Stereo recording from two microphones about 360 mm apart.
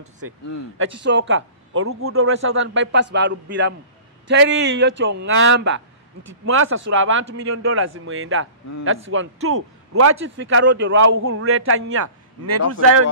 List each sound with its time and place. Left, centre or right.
0.7 s a man's voice: right
7.4 s a man's voice: right